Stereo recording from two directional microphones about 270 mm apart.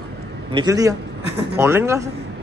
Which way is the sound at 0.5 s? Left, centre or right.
Centre.